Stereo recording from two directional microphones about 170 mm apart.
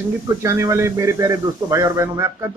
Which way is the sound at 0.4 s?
15° right (ahead or behind).